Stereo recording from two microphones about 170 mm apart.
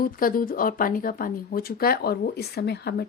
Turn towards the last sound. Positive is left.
turn(degrees=70)  # may be behind; listen again after turning